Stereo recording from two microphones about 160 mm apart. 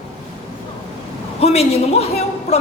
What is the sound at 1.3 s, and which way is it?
A man's voice, 40° left (ahead or behind).